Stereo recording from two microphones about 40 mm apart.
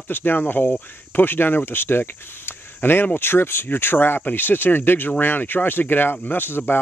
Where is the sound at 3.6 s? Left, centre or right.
Left.